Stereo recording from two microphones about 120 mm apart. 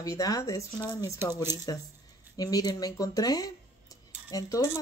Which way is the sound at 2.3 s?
30° left (ahead or behind).